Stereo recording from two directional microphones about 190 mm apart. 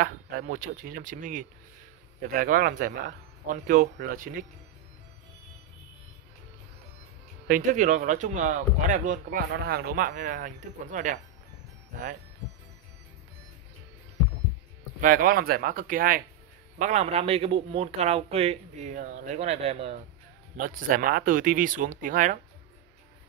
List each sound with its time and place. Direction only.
0.0 s speech: 50° right (ahead or behind)
7.4 s speech: 45° right (ahead or behind)
9.5 s speech: 55° right (ahead or behind)
15.0 s speech: 45° right (ahead or behind)
20.5 s speech: 45° right (ahead or behind)